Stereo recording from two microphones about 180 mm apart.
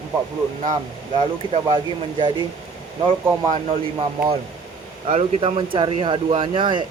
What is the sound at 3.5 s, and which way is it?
Speech, 35° right (ahead or behind).